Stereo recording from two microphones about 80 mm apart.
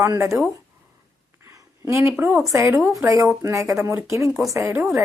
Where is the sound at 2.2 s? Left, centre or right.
Right.